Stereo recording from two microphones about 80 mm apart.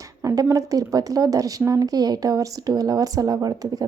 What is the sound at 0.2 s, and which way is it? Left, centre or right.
Speech, right.